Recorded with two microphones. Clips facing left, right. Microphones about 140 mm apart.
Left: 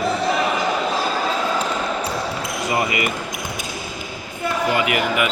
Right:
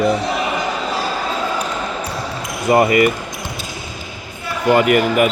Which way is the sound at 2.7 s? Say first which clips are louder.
Right 10 dB; 45° right (ahead or behind).